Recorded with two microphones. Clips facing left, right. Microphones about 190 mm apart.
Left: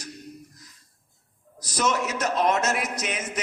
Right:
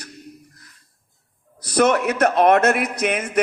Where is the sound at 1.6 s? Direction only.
60° right (ahead or behind).